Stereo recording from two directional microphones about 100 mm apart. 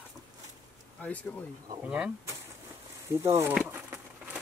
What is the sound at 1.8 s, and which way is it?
Speech, 10° right (ahead or behind).